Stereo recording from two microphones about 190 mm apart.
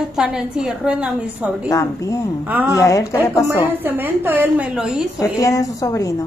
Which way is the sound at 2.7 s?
15° left (ahead or behind).